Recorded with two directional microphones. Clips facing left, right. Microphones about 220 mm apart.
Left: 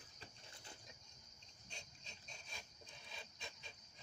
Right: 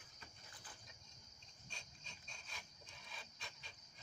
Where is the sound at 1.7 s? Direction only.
20° left (ahead or behind).